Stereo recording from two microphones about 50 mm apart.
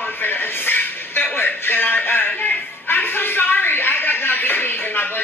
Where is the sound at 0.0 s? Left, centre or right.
Left.